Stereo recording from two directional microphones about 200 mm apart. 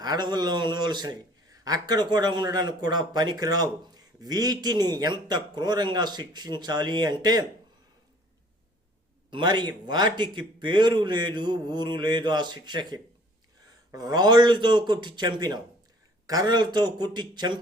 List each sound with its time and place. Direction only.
0.0 s a man's voice: 20° right (ahead or behind)
9.3 s a man's voice: 20° right (ahead or behind)